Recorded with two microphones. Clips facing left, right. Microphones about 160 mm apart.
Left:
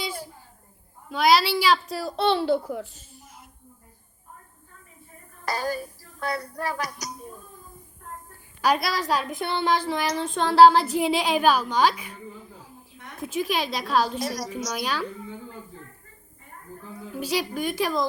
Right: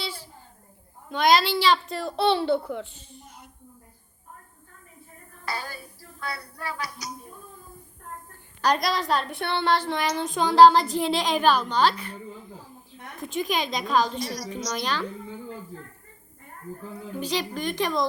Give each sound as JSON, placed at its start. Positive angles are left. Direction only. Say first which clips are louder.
{"t": 1.1, "sound": "a woman's voice", "louder": "left 1 dB", "side_deg": 5}
{"t": 5.5, "sound": "a sound", "louder": "left 7 dB", "side_deg": 40}
{"t": 8.6, "sound": "a woman's voice", "louder": "even", "side_deg": 5}
{"t": 14.2, "sound": "a sound", "louder": "left 2 dB", "side_deg": 50}
{"t": 14.5, "sound": "a woman's voice", "louder": "even", "side_deg": 5}
{"t": 17.2, "sound": "a woman's voice", "louder": "left 2 dB", "side_deg": 5}